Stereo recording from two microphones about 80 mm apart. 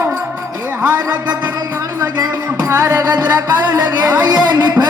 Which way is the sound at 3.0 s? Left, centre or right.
Right.